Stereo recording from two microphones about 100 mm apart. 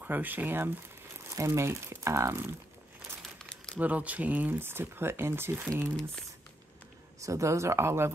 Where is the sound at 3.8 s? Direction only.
15° right (ahead or behind).